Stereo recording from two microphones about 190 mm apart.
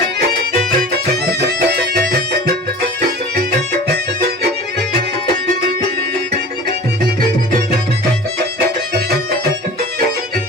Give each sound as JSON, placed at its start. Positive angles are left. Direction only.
{"t": 1.1, "sound": "music", "side_deg": -60}
{"t": 8.5, "sound": "music", "side_deg": -55}